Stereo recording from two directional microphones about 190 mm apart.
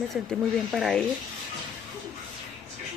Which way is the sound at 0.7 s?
Centre (ahead or behind).